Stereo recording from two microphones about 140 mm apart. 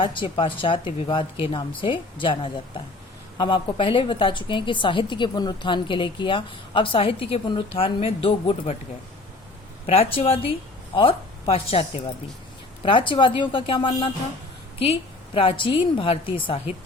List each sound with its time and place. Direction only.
0.0 s a woman's voice: 35° left (ahead or behind)
9.8 s a woman's voice: 45° left (ahead or behind)
15.4 s a woman's voice: 40° left (ahead or behind)